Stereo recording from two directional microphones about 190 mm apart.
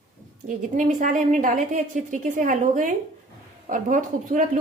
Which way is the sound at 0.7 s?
40° right (ahead or behind).